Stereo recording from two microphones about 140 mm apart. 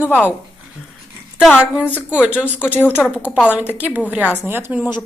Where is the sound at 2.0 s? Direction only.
5° right (ahead or behind).